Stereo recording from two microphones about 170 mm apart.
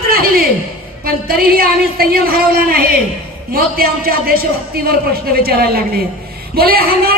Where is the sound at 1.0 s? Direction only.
60° right (ahead or behind).